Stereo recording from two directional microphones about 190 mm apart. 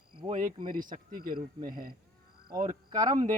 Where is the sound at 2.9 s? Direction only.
20° right (ahead or behind).